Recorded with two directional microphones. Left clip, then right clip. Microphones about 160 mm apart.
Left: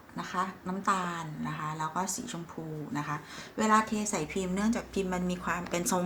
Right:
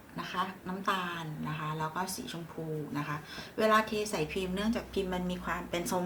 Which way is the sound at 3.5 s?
60° left (ahead or behind).